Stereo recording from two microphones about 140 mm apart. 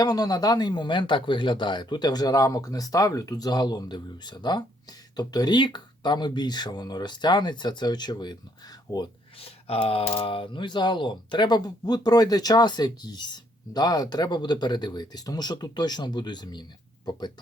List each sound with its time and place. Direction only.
0.0 s speech: 25° left (ahead or behind)
9.4 s speech: 45° left (ahead or behind)